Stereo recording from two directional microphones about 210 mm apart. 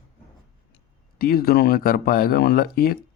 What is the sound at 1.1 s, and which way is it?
A man's voice, 45° left (ahead or behind).